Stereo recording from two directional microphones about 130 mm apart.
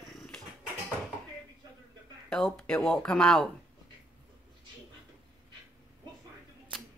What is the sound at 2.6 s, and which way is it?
Speech, 5° left (ahead or behind).